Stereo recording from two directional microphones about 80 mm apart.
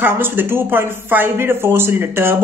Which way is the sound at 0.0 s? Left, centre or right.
Right.